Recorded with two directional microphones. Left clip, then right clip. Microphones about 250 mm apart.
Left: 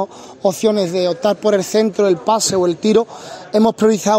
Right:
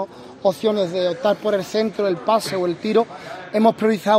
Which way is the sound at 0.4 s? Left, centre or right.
Left.